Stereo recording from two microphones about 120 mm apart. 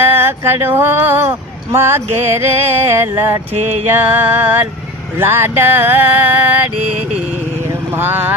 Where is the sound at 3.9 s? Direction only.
15° right (ahead or behind).